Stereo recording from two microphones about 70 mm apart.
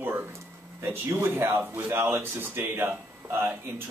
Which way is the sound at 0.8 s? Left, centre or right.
Right.